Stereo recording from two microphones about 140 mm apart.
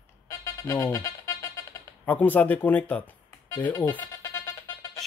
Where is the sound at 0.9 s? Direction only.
20° left (ahead or behind).